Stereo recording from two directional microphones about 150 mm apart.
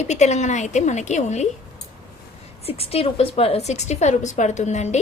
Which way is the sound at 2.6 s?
40° left (ahead or behind).